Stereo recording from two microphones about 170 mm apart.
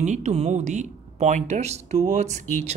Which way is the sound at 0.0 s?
45° right (ahead or behind).